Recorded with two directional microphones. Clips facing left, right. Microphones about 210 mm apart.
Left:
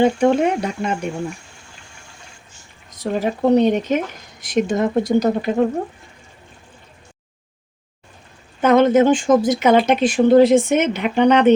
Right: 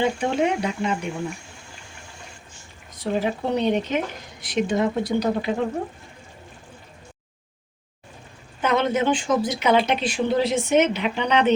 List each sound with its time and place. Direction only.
0.0 s speech: 45° left (ahead or behind)
3.0 s speech: 40° left (ahead or behind)
8.6 s speech: 50° left (ahead or behind)